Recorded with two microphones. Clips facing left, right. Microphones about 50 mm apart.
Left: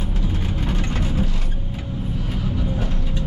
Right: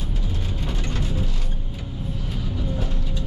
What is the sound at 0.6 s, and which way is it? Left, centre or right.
Vehicle, left.